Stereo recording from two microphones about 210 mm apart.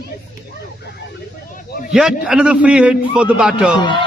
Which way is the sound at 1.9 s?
5° right (ahead or behind).